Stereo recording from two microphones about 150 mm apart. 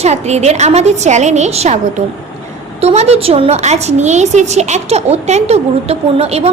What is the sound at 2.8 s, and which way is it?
A woman's voice, 45° right (ahead or behind).